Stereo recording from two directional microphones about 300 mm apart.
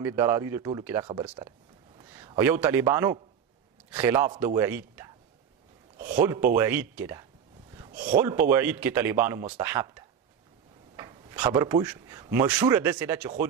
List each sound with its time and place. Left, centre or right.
0.0 s a man's voice: centre
5.9 s a sound: right
6.5 s speech: centre
8.1 s speech: centre